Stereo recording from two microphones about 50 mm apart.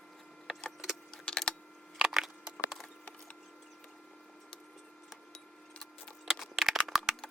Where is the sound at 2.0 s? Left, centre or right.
Centre.